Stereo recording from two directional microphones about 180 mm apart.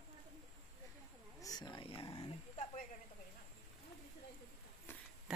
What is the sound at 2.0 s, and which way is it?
Dog, 30° left (ahead or behind).